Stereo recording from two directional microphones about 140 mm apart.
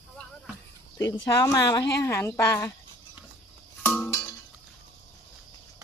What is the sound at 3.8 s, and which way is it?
Music, 5° left (ahead or behind).